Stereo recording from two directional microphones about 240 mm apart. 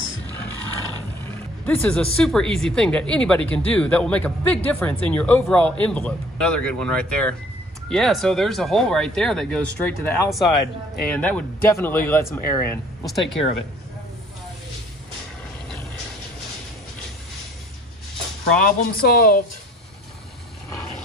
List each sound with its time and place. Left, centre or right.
1.7 s speech: centre
18.6 s speech: left